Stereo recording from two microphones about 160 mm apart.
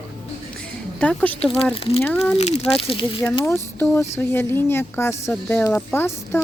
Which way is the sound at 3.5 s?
15° left (ahead or behind).